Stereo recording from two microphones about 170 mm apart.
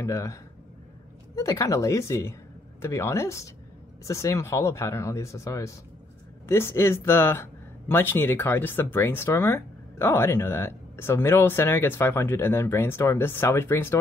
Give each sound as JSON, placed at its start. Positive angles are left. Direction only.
{"t": 0.0, "sound": "speech", "side_deg": 20}